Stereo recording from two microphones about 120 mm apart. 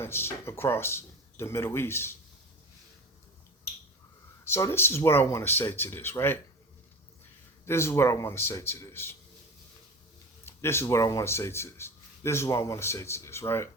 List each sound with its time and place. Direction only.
0.0 s speech: 20° left (ahead or behind)
4.4 s speech: 20° left (ahead or behind)
7.6 s speech: 20° left (ahead or behind)
10.4 s speech: 20° left (ahead or behind)